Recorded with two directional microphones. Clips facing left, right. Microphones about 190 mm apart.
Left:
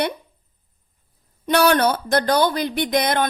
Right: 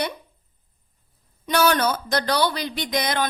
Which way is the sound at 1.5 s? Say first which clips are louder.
Left 3 dB; 55° left (ahead or behind).